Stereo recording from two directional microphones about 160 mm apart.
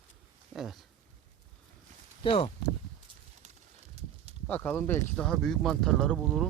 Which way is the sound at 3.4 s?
45° right (ahead or behind).